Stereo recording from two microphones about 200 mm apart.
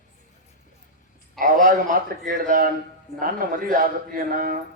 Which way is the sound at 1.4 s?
40° right (ahead or behind).